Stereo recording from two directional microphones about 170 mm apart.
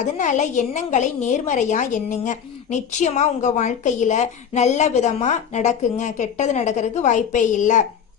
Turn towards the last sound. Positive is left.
turn(degrees=45)  # may be behind; listen again after turning